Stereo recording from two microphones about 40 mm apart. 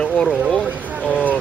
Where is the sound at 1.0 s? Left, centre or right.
Right.